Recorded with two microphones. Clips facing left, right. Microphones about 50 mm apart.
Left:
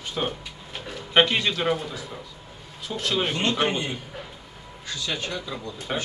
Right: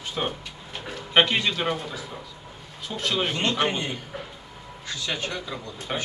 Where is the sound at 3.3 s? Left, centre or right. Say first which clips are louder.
Left 1 dB; centre.